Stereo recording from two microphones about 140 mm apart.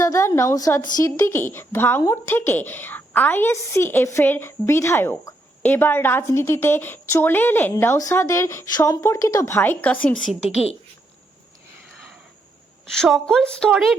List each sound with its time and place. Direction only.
0.0 s a woman's voice: 20° left (ahead or behind)
12.8 s a woman's voice: 5° left (ahead or behind)